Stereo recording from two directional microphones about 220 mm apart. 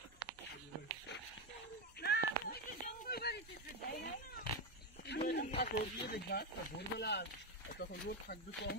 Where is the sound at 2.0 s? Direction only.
45° left (ahead or behind).